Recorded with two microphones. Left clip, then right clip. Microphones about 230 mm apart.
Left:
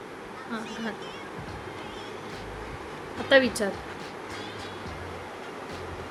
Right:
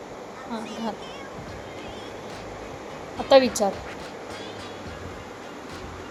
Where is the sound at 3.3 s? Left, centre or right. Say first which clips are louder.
Right 4 dB; centre.